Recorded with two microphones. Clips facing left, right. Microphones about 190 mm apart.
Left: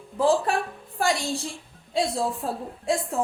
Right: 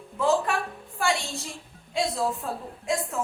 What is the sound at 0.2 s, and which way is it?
A woman's voice, 35° left (ahead or behind).